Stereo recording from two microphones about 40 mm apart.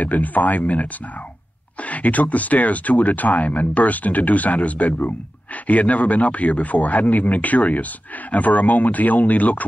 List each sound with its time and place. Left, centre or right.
0.0 s speech: left